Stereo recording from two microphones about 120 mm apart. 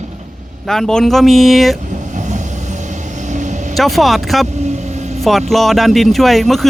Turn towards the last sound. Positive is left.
turn(degrees=0)  # may be behind; listen again after turning